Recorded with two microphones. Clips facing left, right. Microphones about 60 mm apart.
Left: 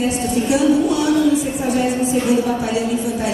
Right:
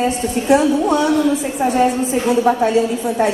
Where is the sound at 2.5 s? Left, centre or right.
Right.